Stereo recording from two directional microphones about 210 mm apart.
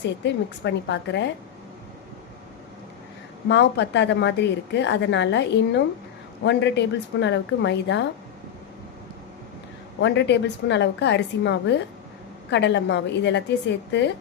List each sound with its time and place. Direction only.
0.0 s a woman's voice: 55° left (ahead or behind)
3.5 s a woman's voice: 55° left (ahead or behind)
10.0 s a woman's voice: 55° left (ahead or behind)